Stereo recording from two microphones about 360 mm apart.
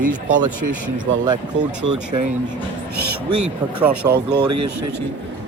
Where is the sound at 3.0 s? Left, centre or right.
Right.